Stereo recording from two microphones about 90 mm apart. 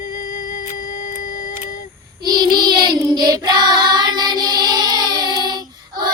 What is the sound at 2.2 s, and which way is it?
Child singing, 55° right (ahead or behind).